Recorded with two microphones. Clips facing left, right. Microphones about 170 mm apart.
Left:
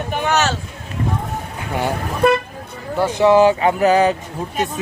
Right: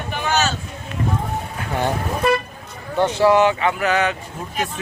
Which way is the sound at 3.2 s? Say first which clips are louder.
Left 4 dB; 30° left (ahead or behind).